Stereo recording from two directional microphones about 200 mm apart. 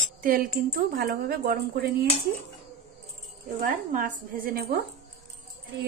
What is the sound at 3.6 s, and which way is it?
A woman's voice, 45° right (ahead or behind).